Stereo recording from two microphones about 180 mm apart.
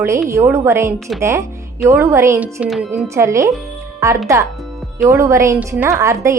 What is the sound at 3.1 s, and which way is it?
A woman's voice, 15° right (ahead or behind).